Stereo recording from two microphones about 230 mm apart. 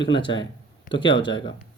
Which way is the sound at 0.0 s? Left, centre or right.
Left.